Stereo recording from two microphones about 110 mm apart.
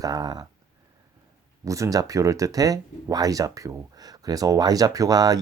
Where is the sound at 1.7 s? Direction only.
30° right (ahead or behind).